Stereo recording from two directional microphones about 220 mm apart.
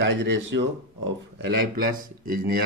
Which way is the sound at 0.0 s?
55° right (ahead or behind).